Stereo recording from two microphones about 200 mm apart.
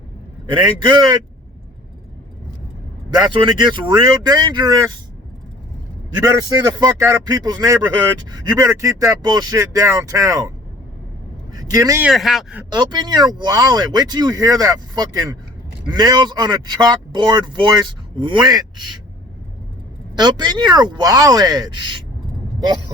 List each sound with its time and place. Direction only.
0.5 s speech: 25° right (ahead or behind)
3.1 s speech: 20° right (ahead or behind)
6.1 s speech: 20° right (ahead or behind)
11.5 s speech: 15° right (ahead or behind)
12.0 s speech: centre (ahead or behind)
12.7 s speech: 20° right (ahead or behind)
20.1 s speech: 20° right (ahead or behind)